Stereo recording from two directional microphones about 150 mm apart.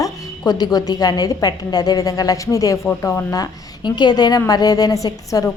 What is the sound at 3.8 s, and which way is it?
Speech, 30° left (ahead or behind).